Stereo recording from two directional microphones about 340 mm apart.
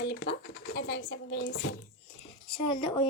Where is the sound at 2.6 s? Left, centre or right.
Centre.